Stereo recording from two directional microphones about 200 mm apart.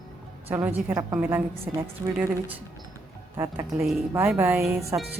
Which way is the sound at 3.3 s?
15° right (ahead or behind).